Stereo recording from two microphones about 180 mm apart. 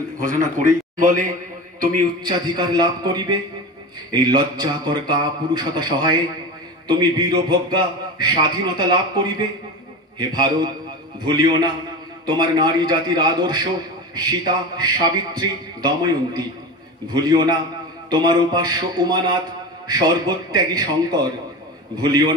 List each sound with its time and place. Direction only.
0.2 s a man's voice: 45° right (ahead or behind)
2.2 s a man's voice: 25° right (ahead or behind)